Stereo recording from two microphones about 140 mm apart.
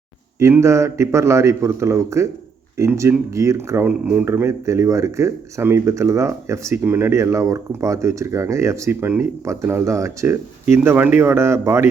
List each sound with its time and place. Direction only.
0.3 s speech: 20° right (ahead or behind)